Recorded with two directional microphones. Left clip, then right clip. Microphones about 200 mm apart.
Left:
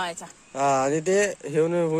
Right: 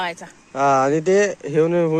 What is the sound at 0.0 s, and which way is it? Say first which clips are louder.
Speech: right 4 dB; 60° left (ahead or behind).